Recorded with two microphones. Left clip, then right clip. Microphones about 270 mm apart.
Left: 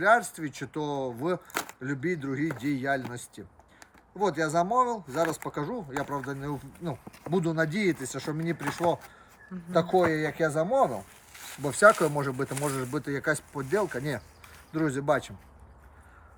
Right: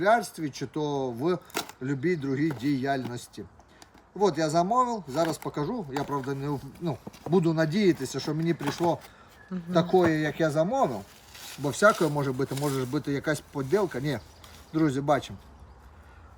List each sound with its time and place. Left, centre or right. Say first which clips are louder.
0.0 s speech: left 1 dB; centre